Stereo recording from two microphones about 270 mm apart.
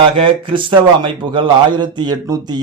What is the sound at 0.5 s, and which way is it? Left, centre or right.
A man's voice, centre.